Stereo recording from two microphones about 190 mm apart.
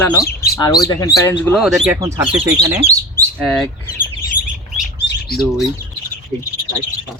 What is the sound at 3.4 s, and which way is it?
Speech, centre (ahead or behind).